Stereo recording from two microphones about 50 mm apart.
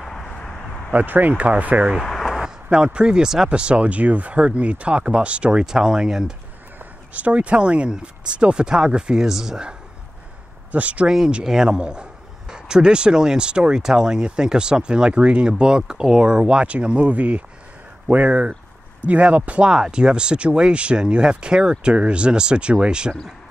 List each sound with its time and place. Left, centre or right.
0.0 s a sound: centre
0.9 s speech: right
1.3 s speech: right
2.0 s a sound: centre
2.4 s speech: centre
7.2 s a man's voice: right
10.7 s speech: right
11.1 s a man's voice: centre
19.7 s speech: centre